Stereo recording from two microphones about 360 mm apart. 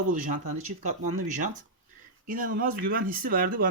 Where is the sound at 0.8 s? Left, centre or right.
Centre.